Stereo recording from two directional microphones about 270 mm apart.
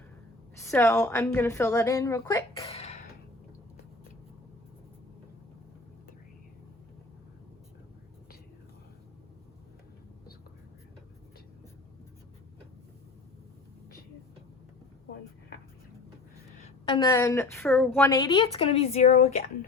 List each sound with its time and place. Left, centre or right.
0.6 s a woman's voice: centre
2.6 s throat clearing: left
16.8 s a woman's voice: centre